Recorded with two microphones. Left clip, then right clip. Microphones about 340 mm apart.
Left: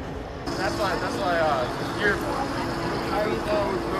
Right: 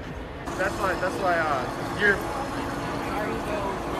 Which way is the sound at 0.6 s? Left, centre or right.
Centre.